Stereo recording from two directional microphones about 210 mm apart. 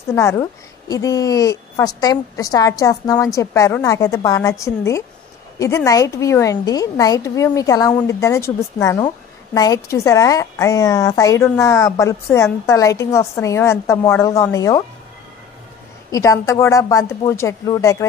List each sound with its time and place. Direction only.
0.1 s a woman's voice: 15° left (ahead or behind)
16.1 s a woman's voice: 15° left (ahead or behind)